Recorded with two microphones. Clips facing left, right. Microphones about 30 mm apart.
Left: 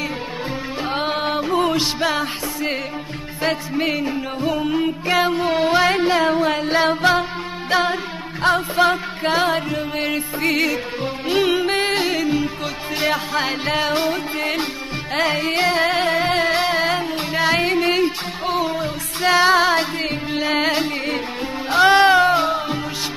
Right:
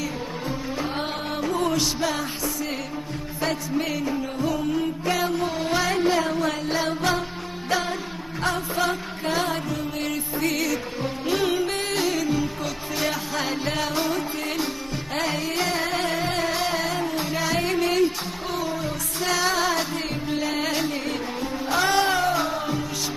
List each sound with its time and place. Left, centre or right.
0.9 s music: left